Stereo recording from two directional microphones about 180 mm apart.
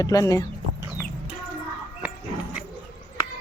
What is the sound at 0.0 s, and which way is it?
Speech, 20° left (ahead or behind).